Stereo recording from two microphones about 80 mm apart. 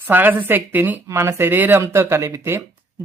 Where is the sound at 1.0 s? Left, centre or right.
Right.